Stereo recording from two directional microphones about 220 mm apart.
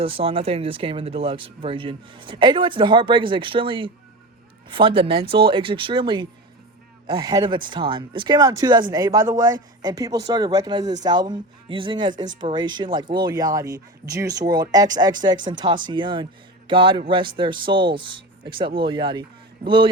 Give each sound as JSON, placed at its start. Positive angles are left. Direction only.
{"t": 0.0, "sound": "speech", "side_deg": -25}